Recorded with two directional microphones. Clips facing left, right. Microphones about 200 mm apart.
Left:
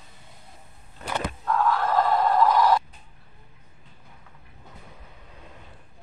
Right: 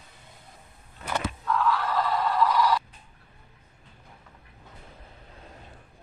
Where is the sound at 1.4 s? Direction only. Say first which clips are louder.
Left 3 dB; 45° left (ahead or behind).